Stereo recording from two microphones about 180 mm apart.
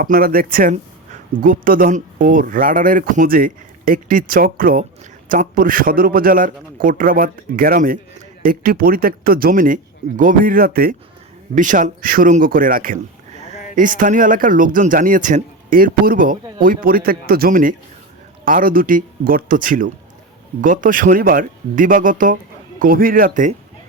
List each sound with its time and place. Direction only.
0.0 s speech: 55° right (ahead or behind)